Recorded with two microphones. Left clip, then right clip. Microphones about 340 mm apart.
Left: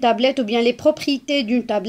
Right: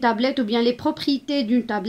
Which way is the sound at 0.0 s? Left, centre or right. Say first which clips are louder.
Left 4 dB; centre.